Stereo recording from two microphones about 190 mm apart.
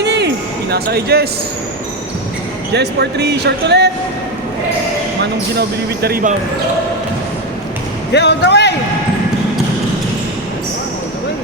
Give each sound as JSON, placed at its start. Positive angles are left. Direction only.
{"t": 0.0, "sound": "basketball bounce", "side_deg": -60}
{"t": 0.7, "sound": "speech", "side_deg": -60}
{"t": 2.7, "sound": "speech", "side_deg": -60}
{"t": 5.2, "sound": "speech", "side_deg": -60}
{"t": 8.1, "sound": "a man's voice", "side_deg": 65}